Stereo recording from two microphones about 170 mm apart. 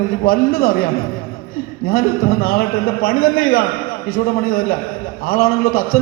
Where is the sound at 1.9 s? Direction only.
60° left (ahead or behind).